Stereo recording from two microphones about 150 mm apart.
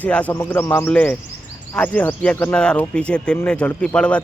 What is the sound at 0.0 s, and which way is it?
Speech, 10° left (ahead or behind).